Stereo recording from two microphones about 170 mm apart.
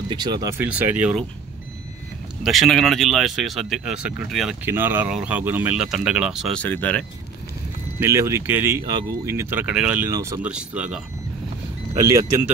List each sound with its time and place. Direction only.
0.1 s speech: 25° right (ahead or behind)
0.6 s speech: 10° right (ahead or behind)
2.4 s speech: centre (ahead or behind)
4.6 s speech: 15° right (ahead or behind)
6.6 s speech: 10° left (ahead or behind)
8.0 s speech: 15° right (ahead or behind)